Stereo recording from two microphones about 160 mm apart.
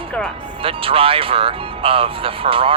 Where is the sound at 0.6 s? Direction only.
35° right (ahead or behind).